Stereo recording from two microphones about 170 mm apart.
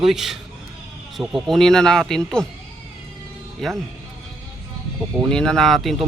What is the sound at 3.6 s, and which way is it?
Speech, centre (ahead or behind).